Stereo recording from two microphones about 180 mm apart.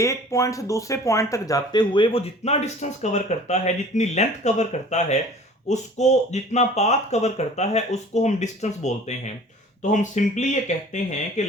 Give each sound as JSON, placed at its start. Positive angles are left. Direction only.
{"t": 0.0, "sound": "speech", "side_deg": 15}